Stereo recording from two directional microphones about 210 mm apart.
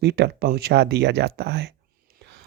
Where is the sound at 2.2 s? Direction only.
55° right (ahead or behind).